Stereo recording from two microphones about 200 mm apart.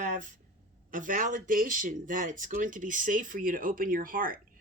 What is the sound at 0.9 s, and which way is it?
Speech, 40° right (ahead or behind).